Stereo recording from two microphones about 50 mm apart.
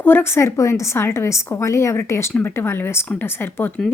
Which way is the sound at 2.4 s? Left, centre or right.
Left.